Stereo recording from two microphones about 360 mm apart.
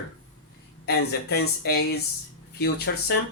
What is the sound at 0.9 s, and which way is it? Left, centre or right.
Speech, left.